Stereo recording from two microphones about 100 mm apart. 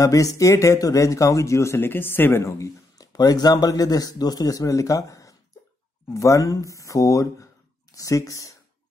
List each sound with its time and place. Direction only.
0.0 s speech: 35° left (ahead or behind)